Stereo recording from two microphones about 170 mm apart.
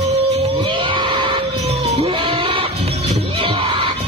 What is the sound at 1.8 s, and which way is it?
Music, 35° right (ahead or behind).